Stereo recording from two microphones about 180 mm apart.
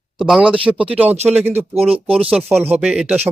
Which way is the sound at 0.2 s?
5° right (ahead or behind).